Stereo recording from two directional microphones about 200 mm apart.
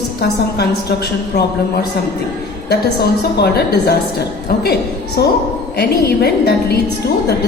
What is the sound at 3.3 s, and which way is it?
A woman's voice, 55° left (ahead or behind).